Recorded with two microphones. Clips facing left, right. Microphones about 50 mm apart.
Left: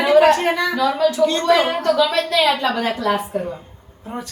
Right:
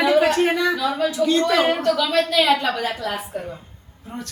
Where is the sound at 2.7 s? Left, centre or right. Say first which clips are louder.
Left 5 dB; left.